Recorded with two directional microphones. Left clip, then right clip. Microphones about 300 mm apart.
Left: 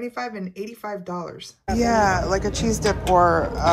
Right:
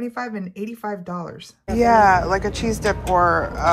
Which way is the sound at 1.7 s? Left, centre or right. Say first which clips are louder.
Right 5 dB; centre.